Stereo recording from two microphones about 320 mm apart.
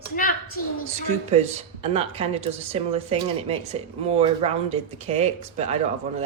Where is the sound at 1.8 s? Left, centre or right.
Centre.